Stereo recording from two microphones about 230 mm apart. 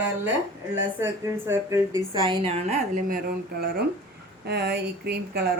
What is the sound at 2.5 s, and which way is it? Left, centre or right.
Speech, right.